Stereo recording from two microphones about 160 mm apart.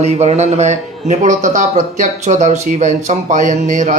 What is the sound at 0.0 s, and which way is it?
A man's voice, 45° right (ahead or behind).